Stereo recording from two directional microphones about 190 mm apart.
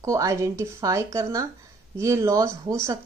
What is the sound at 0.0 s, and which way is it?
A woman's voice, 15° right (ahead or behind).